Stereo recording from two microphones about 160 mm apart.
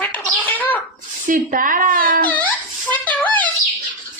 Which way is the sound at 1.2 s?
60° right (ahead or behind).